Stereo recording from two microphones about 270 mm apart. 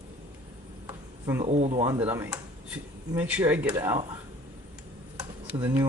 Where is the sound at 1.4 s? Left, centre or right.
Right.